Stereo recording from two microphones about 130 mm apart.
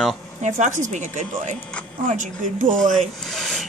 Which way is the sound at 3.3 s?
5° left (ahead or behind).